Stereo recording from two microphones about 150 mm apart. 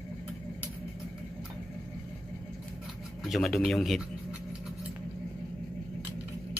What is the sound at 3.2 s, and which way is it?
Speech, centre (ahead or behind).